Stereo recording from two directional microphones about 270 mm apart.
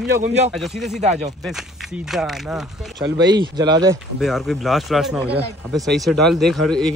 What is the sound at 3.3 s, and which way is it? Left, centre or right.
Speech, centre.